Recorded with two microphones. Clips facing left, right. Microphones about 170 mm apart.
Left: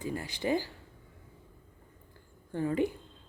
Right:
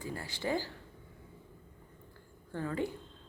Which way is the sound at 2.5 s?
20° left (ahead or behind).